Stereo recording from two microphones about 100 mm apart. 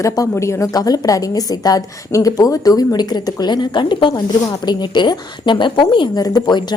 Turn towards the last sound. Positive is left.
turn(degrees=45)  # may be behind; listen again after turning